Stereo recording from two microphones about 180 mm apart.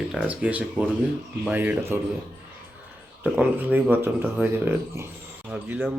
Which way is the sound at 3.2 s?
10° right (ahead or behind).